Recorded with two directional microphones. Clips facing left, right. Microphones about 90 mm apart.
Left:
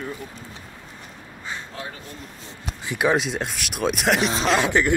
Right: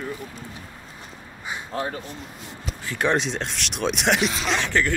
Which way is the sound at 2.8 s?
15° left (ahead or behind).